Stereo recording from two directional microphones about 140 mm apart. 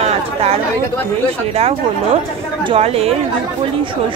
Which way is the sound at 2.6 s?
45° right (ahead or behind).